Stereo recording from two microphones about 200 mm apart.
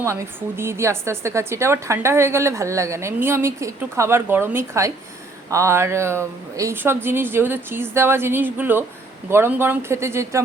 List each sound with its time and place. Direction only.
0.0 s a woman's voice: 15° right (ahead or behind)